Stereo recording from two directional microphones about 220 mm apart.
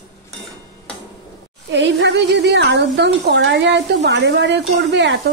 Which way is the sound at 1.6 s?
55° right (ahead or behind).